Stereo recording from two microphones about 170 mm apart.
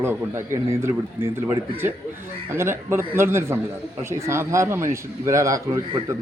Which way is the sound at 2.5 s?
15° right (ahead or behind).